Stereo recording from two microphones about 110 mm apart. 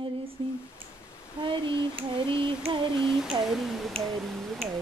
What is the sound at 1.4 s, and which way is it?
Speech, 50° right (ahead or behind).